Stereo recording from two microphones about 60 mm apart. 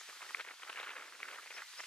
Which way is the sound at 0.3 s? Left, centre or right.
Centre.